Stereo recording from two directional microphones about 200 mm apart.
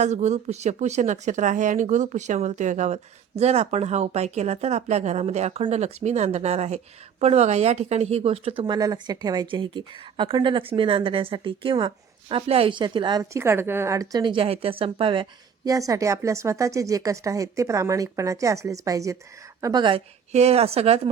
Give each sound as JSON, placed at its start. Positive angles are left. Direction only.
{"t": 0.0, "sound": "a woman's voice", "side_deg": -35}